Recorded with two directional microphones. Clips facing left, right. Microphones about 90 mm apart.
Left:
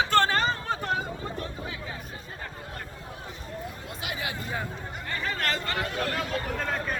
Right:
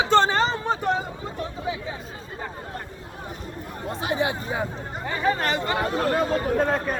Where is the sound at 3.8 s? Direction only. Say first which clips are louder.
Right 13 dB; 35° right (ahead or behind).